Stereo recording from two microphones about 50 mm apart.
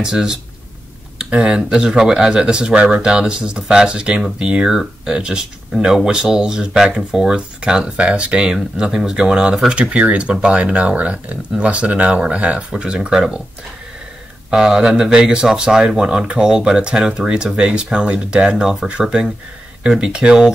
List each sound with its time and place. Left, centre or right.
0.0 s speech: centre
14.5 s speech: centre